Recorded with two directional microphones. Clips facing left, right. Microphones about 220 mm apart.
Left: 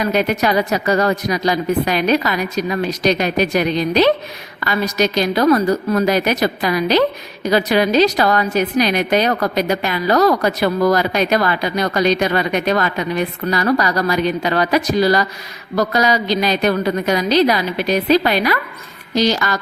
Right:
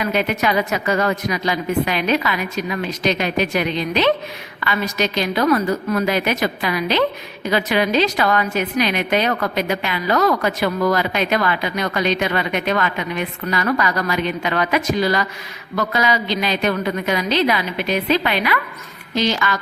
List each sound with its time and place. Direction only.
0.0 s a woman's voice: 40° left (ahead or behind)